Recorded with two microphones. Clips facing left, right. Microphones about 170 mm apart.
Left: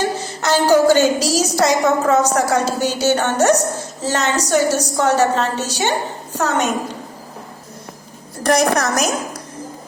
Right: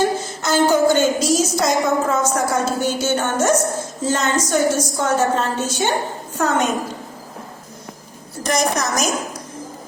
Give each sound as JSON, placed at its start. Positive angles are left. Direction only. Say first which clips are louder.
{"t": 0.7, "sound": "a woman's voice", "louder": "left 5 dB", "side_deg": 70}
{"t": 8.4, "sound": "a woman's voice", "louder": "left 4 dB", "side_deg": 60}